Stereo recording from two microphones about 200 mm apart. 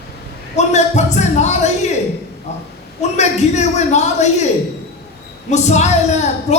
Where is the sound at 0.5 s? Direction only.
35° left (ahead or behind).